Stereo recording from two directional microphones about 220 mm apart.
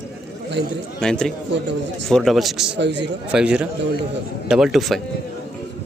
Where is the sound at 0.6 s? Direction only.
55° right (ahead or behind).